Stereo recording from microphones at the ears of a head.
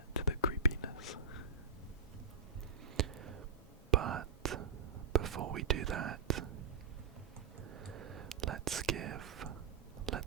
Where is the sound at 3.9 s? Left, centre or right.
Right.